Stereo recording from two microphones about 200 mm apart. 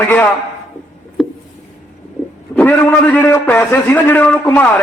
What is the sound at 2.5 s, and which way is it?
A man's voice, 10° left (ahead or behind).